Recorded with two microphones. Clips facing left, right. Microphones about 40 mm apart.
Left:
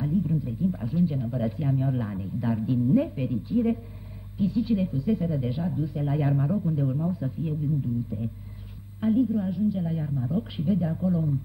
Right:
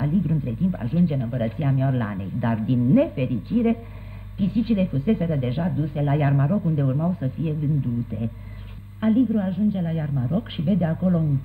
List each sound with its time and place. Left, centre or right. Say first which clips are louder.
0.0 s a woman's voice: right 3 dB; right